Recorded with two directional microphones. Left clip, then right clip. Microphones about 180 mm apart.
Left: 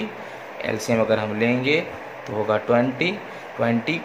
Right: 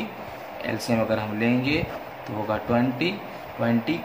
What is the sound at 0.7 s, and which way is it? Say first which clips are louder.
Speech: left 4 dB; 15° left (ahead or behind).